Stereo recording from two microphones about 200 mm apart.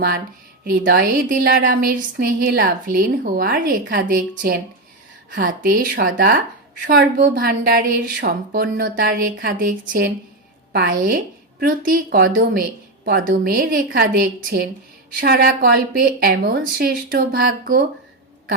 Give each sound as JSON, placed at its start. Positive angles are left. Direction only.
{"t": 0.6, "sound": "a woman's voice", "side_deg": -50}